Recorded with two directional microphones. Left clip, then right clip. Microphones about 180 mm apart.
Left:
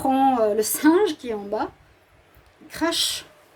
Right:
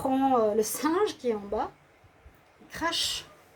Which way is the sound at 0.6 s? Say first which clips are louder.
Left 7 dB; 55° left (ahead or behind).